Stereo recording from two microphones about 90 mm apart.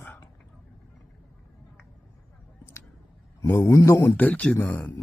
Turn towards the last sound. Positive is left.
turn(degrees=15)  # may be behind; listen again after turning